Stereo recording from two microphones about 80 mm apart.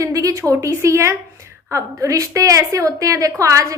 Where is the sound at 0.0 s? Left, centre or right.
Right.